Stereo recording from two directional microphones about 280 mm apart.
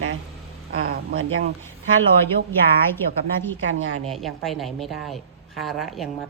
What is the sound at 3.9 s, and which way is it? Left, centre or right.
Speech, right.